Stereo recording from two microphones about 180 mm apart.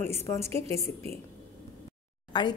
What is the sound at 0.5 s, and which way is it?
Speech, 35° right (ahead or behind).